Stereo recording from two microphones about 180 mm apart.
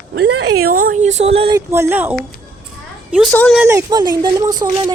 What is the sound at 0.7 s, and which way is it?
Speech, 50° right (ahead or behind).